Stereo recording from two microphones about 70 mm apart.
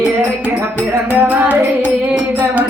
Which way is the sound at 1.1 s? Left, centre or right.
Right.